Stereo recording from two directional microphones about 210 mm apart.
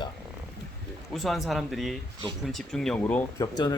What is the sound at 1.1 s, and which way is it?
Speech, centre (ahead or behind).